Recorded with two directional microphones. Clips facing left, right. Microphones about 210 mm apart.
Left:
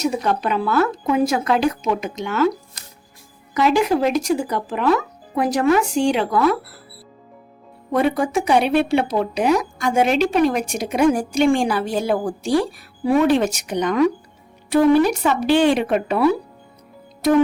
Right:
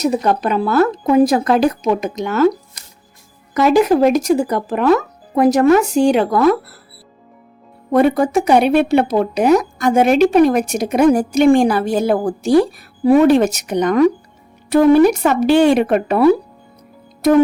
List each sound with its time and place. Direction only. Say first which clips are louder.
0.0 s speech: right 4 dB; 40° right (ahead or behind)
3.5 s a woman's voice: right 5 dB; 45° right (ahead or behind)
7.9 s a woman's voice: right 5 dB; 45° right (ahead or behind)